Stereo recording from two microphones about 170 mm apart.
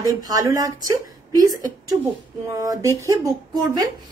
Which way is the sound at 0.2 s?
20° right (ahead or behind).